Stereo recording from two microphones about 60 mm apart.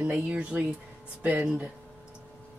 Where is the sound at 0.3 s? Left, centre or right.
Centre.